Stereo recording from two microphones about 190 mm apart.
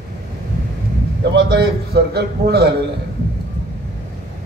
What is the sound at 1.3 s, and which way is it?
A man's voice, 60° right (ahead or behind).